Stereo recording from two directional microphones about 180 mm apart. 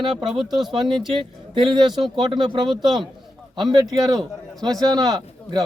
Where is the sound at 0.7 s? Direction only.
25° right (ahead or behind).